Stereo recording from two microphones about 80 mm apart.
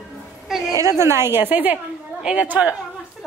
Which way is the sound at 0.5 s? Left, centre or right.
Centre.